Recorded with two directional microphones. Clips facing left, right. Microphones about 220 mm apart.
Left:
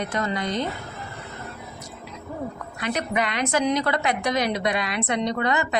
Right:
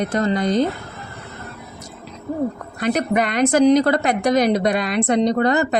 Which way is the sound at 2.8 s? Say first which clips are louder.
Right 7 dB; 45° right (ahead or behind).